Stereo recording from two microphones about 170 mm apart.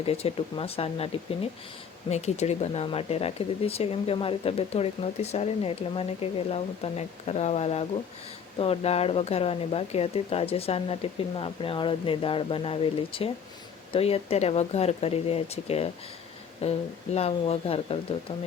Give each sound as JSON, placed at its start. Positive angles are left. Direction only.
{"t": 0.0, "sound": "speech", "side_deg": 35}